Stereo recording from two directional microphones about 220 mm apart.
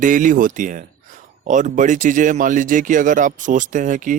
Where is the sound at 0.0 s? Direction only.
35° right (ahead or behind).